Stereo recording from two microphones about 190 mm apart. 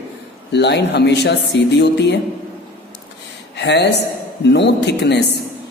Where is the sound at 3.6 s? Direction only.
65° left (ahead or behind).